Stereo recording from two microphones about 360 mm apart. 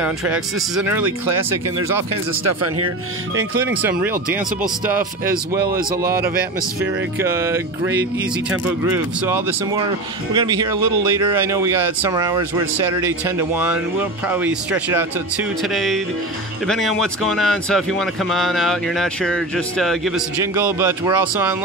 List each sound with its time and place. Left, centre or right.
0.0 s speech: centre
2.4 s speech: right
3.6 s speech: centre
7.2 s speech: centre